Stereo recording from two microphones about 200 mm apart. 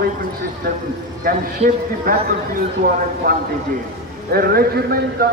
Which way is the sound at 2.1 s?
45° right (ahead or behind).